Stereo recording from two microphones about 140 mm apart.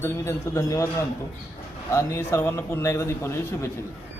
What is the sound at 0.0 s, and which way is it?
Speech, 20° left (ahead or behind).